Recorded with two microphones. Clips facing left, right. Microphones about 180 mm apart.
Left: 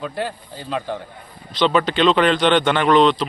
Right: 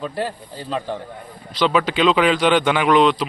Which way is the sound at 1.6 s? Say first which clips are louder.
Left 1 dB; 5° right (ahead or behind).